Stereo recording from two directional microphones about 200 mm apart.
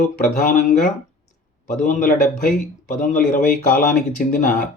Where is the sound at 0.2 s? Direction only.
45° left (ahead or behind).